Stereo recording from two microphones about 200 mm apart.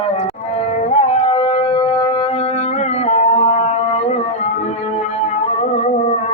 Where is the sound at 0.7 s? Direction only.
35° left (ahead or behind).